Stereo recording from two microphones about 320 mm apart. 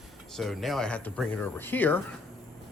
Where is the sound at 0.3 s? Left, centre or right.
Centre.